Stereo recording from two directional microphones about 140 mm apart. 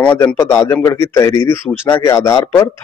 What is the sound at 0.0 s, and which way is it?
A man's voice, 10° left (ahead or behind).